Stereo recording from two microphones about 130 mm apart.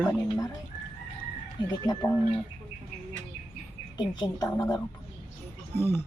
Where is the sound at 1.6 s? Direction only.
35° left (ahead or behind).